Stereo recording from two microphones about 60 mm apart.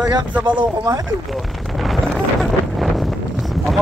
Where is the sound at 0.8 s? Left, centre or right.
Right.